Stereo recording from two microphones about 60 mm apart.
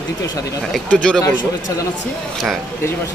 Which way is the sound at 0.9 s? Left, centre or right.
Centre.